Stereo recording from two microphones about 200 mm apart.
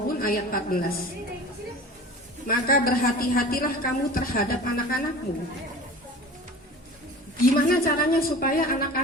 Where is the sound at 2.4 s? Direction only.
45° left (ahead or behind).